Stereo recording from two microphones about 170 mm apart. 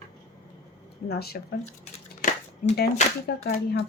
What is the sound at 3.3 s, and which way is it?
Speech, 70° left (ahead or behind).